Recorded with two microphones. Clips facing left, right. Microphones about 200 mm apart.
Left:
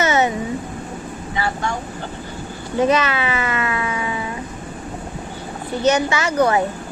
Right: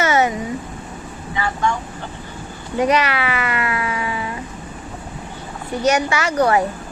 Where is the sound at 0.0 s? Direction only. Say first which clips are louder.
Even; 20° left (ahead or behind).